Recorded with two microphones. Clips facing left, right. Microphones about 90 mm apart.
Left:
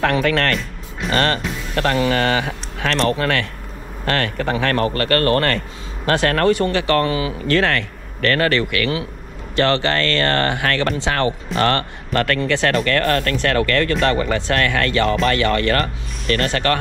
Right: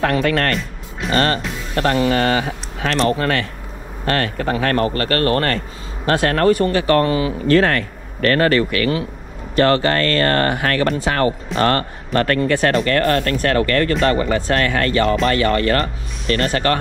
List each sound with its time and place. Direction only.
0.0 s speech: 40° right (ahead or behind)